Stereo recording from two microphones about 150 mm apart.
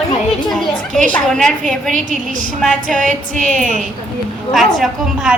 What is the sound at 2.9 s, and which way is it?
Music, 60° right (ahead or behind).